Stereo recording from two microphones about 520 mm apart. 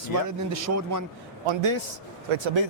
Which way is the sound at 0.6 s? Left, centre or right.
Right.